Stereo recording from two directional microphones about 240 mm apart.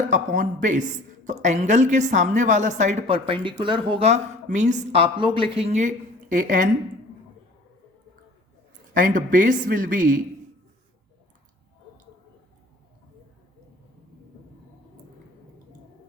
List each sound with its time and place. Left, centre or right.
0.1 s speech: right
8.9 s speech: right